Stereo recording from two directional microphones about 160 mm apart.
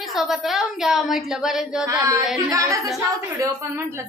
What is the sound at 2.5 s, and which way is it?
Speech, 20° right (ahead or behind).